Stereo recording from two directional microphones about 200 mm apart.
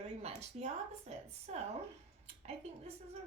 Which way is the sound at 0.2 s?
30° right (ahead or behind).